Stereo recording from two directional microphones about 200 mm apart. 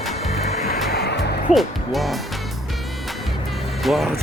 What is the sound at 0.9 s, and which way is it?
Music, 55° left (ahead or behind).